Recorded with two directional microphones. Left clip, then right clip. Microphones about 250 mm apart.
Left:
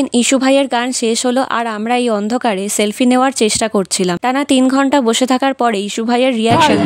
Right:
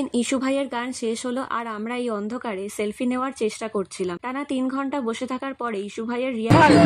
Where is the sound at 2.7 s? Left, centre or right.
Left.